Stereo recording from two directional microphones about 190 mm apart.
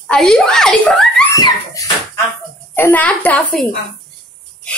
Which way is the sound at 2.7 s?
10° left (ahead or behind).